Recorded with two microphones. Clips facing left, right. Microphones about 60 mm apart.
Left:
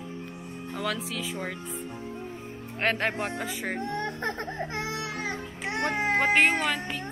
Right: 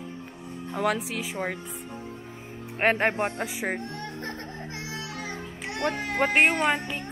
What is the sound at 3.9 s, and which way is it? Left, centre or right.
Baby cry, left.